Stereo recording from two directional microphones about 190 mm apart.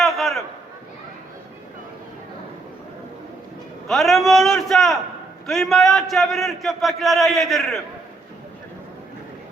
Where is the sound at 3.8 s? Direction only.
Centre (ahead or behind).